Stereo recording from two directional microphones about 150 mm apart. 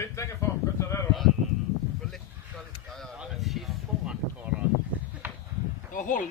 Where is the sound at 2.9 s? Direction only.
Centre (ahead or behind).